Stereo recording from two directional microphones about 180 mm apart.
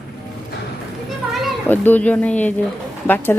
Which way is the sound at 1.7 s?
10° left (ahead or behind).